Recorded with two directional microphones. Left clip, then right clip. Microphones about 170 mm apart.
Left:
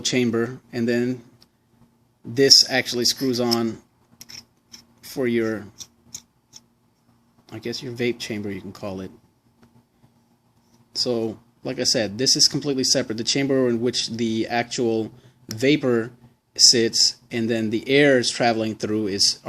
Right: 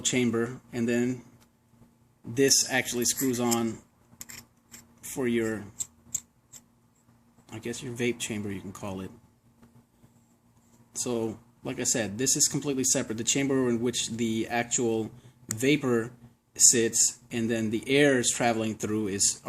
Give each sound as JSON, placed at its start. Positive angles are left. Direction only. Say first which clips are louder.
{"t": 0.0, "sound": "speech", "louder": "left 5 dB", "side_deg": 40}
{"t": 2.3, "sound": "speech", "louder": "left 9 dB", "side_deg": 35}
{"t": 4.4, "sound": "tick-tock", "louder": "left 6 dB", "side_deg": 0}
{"t": 4.9, "sound": "speech", "louder": "left 6 dB", "side_deg": 35}
{"t": 7.5, "sound": "speech", "louder": "left 6 dB", "side_deg": 35}
{"t": 10.9, "sound": "speech", "louder": "left 7 dB", "side_deg": 35}